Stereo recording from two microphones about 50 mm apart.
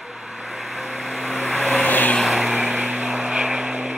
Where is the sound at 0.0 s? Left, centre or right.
Centre.